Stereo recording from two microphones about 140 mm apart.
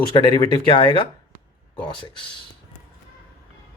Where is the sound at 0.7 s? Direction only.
35° left (ahead or behind).